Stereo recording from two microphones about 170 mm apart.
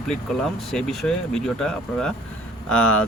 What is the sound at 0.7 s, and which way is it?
Speech, centre (ahead or behind).